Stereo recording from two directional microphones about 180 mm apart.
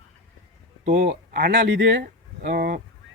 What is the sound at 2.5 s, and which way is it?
Speech, 55° right (ahead or behind).